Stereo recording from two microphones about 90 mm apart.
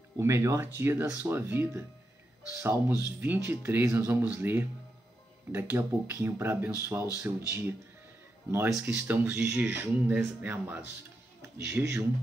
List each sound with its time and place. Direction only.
0.2 s speech: 30° right (ahead or behind)